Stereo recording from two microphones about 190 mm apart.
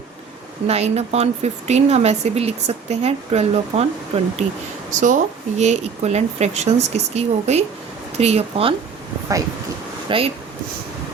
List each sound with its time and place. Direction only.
0.7 s speech: 35° right (ahead or behind)
10.1 s speech: 30° right (ahead or behind)